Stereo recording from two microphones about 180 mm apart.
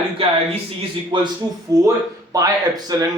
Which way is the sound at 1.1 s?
25° right (ahead or behind).